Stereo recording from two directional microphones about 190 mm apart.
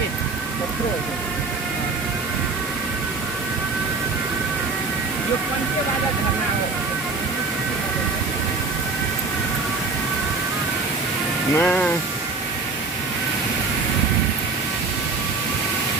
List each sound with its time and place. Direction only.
11.5 s speech: 10° left (ahead or behind)